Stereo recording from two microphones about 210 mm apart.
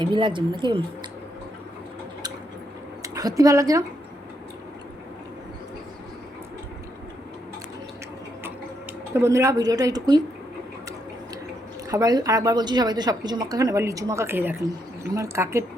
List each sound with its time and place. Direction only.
0.0 s speech: 20° right (ahead or behind)
3.0 s speech: 15° right (ahead or behind)
9.1 s a woman's voice: 15° right (ahead or behind)
11.9 s a woman's voice: 15° right (ahead or behind)